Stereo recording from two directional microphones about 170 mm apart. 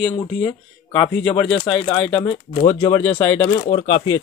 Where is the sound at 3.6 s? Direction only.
35° left (ahead or behind).